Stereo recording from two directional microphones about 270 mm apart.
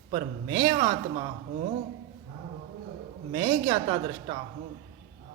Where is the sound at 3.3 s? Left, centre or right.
Centre.